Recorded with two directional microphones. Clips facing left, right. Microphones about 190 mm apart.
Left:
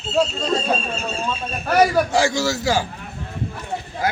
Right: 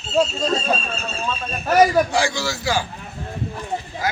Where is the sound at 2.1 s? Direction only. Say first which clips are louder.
Left 3 dB; 40° left (ahead or behind).